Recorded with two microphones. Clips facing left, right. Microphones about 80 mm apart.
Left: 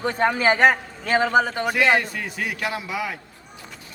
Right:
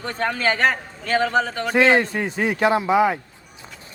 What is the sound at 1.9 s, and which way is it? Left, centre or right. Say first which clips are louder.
A man's voice: right 3 dB; right.